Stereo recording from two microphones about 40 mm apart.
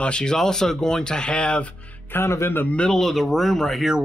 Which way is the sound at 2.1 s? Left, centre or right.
Left.